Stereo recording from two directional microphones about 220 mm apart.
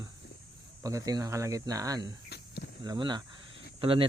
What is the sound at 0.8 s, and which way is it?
Speech, 15° right (ahead or behind).